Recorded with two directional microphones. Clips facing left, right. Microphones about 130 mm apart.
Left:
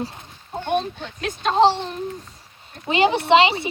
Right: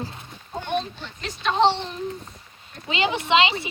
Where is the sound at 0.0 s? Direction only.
30° left (ahead or behind).